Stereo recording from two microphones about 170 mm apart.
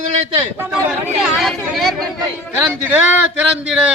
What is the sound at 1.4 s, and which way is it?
A man's voice, centre (ahead or behind).